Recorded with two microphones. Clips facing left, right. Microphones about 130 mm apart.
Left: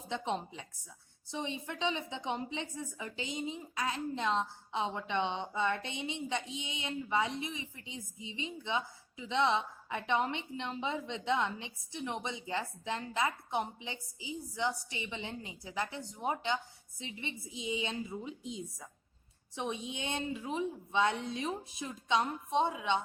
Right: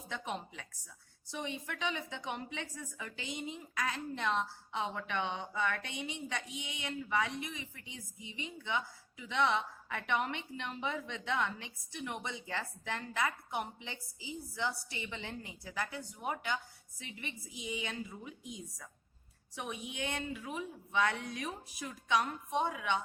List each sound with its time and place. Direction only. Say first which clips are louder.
0.1 s a woman's voice: left 5 dB; 25° left (ahead or behind)